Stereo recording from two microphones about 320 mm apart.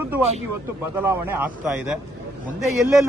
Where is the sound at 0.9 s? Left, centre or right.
Centre.